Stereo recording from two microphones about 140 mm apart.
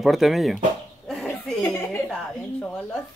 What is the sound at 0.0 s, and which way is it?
Speech, centre (ahead or behind).